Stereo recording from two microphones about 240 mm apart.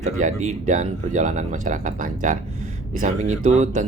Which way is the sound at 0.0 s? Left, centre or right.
Right.